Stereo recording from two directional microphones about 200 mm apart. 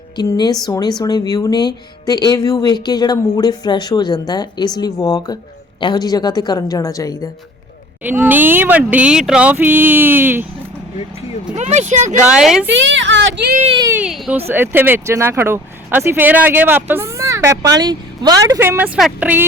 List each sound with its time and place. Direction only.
0.2 s speech: 20° left (ahead or behind)
8.0 s speech: 10° right (ahead or behind)
11.5 s speech: 35° right (ahead or behind)
12.3 s speech: 5° right (ahead or behind)
12.6 s a woman's voice: 65° right (ahead or behind)
13.6 s speech: 30° right (ahead or behind)
13.8 s speech: 5° right (ahead or behind)